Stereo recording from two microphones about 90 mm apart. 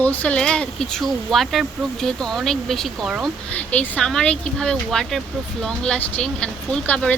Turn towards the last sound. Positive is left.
turn(degrees=15)  # may be behind; listen again after turning